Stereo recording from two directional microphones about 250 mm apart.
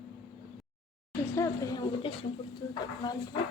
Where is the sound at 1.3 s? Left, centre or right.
Centre.